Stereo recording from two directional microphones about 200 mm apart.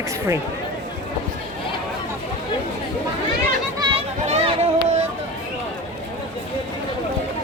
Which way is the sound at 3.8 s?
25° right (ahead or behind).